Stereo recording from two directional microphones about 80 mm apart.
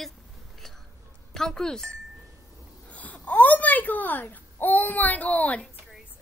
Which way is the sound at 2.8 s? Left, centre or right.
Centre.